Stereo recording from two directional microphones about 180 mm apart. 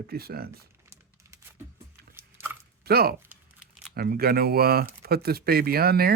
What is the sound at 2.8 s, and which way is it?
Speech, 60° right (ahead or behind).